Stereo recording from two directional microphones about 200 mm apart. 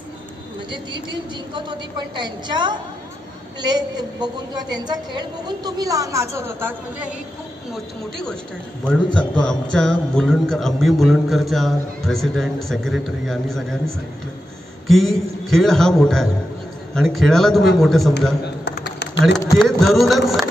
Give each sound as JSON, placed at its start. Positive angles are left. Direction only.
{"t": 1.5, "sound": "a woman's voice", "side_deg": -20}
{"t": 7.7, "sound": "speech", "side_deg": 5}
{"t": 18.4, "sound": "a sound", "side_deg": 55}
{"t": 19.5, "sound": "speech", "side_deg": 0}